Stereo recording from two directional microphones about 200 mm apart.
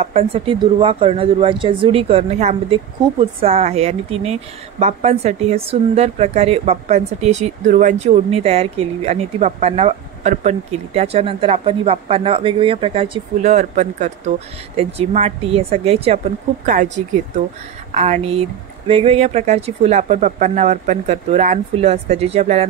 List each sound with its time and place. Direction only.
0.0 s speech: 30° right (ahead or behind)